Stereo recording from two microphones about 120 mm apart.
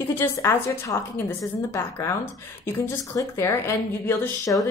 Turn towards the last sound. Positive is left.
turn(degrees=25)  # may be behind; listen again after turning